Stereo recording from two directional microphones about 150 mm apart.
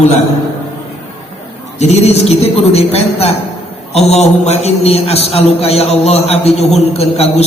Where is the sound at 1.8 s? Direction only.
45° left (ahead or behind).